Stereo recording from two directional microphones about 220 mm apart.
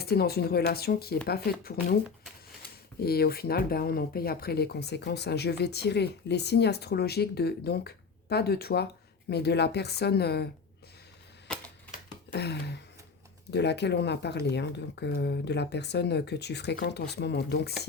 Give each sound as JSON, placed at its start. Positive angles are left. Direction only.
{"t": 0.0, "sound": "speech", "side_deg": 45}
{"t": 11.4, "sound": "typewriter", "side_deg": 5}
{"t": 12.3, "sound": "a sound", "side_deg": 50}
{"t": 13.5, "sound": "speech", "side_deg": 50}